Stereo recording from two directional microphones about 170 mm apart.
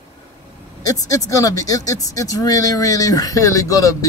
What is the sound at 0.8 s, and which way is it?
Speech, 20° left (ahead or behind).